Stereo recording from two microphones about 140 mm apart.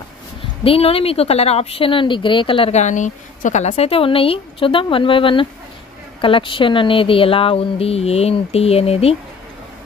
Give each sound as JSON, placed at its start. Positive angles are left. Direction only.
{"t": 0.7, "sound": "speech", "side_deg": 45}
{"t": 2.8, "sound": "speech", "side_deg": 60}